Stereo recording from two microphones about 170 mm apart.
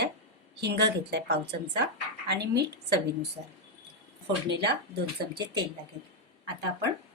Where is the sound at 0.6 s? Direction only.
80° right.